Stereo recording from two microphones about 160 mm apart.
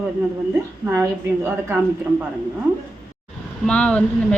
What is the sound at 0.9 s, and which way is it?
Speech, 15° right (ahead or behind).